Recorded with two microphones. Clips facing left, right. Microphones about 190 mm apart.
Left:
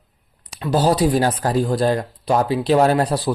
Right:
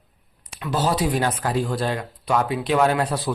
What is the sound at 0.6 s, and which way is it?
Speech, 35° left (ahead or behind).